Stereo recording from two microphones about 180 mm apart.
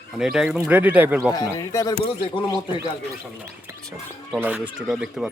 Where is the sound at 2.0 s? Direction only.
30° left (ahead or behind).